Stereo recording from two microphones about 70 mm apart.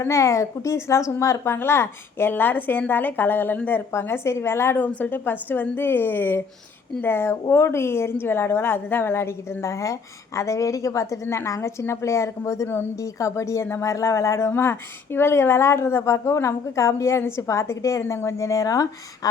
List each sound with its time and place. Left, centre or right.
0.0 s a woman's voice: left
4.8 s a woman's voice: left
12.6 s a woman's voice: left
13.0 s speech: left